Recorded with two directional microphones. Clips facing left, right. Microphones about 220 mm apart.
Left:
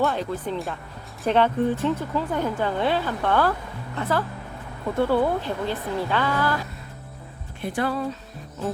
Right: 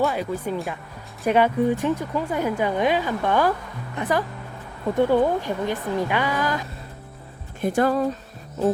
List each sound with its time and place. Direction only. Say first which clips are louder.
0.0 s a woman's voice: right 1 dB; 5° right (ahead or behind)
7.6 s speech: right 5 dB; 45° right (ahead or behind)